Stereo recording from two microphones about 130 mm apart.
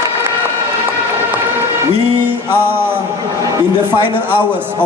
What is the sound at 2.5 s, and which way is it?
Speech, 15° right (ahead or behind).